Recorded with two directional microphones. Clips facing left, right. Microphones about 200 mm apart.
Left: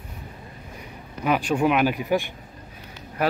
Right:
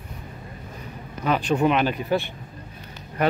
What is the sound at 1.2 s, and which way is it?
Speech, 10° left (ahead or behind).